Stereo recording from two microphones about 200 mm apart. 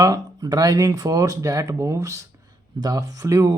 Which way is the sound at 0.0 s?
20° right (ahead or behind).